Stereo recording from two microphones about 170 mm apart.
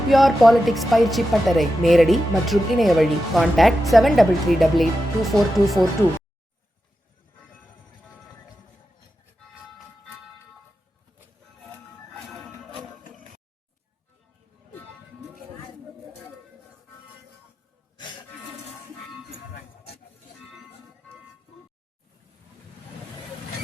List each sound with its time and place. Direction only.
0.1 s speech: centre (ahead or behind)